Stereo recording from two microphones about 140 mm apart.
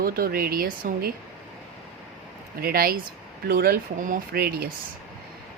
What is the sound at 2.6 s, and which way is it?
Speech, 90° right.